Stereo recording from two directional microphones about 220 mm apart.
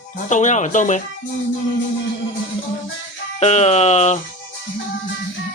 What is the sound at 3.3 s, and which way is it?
Speech, 30° left (ahead or behind).